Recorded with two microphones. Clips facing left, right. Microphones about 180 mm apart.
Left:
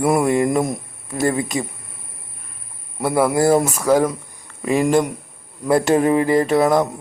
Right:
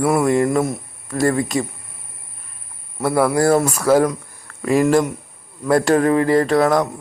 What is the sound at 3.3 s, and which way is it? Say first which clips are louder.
Speech: left 1 dB; 20° left (ahead or behind).